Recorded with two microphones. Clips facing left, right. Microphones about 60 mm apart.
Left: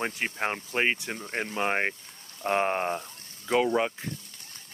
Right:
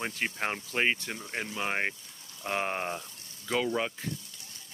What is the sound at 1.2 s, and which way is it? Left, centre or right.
Speech, left.